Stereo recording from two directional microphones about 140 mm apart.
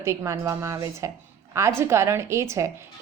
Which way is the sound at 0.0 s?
20° right (ahead or behind).